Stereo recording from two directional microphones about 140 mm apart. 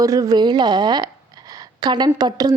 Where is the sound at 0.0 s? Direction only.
25° right (ahead or behind).